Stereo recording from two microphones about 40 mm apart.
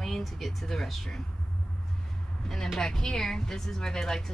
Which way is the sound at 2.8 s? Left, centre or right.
Centre.